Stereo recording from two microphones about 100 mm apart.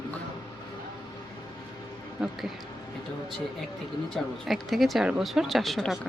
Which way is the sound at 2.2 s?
Centre (ahead or behind).